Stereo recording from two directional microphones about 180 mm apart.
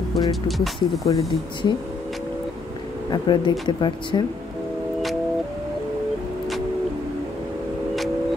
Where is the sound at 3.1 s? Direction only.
25° left (ahead or behind).